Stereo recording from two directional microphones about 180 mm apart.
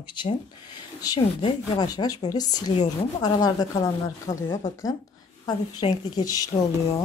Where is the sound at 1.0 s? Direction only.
25° left (ahead or behind).